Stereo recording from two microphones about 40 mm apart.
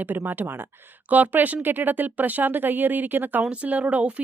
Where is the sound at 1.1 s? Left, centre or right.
Right.